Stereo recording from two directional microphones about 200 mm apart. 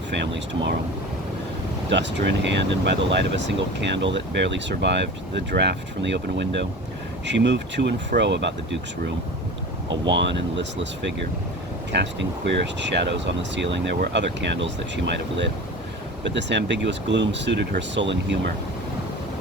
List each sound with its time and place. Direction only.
0.1 s speech: 60° right (ahead or behind)
1.9 s speech: 60° right (ahead or behind)
9.9 s speech: 65° right (ahead or behind)